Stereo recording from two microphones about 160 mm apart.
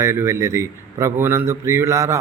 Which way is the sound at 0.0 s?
15° right (ahead or behind).